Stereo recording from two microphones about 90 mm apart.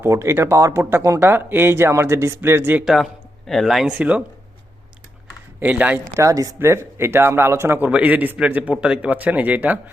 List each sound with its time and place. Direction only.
0.0 s speech: 35° right (ahead or behind)
1.2 s speech: 25° right (ahead or behind)
2.8 s a man's voice: centre (ahead or behind)
3.8 s a man's voice: 15° right (ahead or behind)
5.5 s speech: 15° right (ahead or behind)
6.1 s speech: 40° right (ahead or behind)
6.6 s speech: 30° right (ahead or behind)
7.9 s a man's voice: 15° right (ahead or behind)